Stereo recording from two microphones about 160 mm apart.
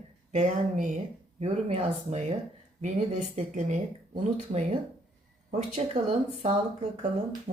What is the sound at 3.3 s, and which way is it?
Speech, 50° right (ahead or behind).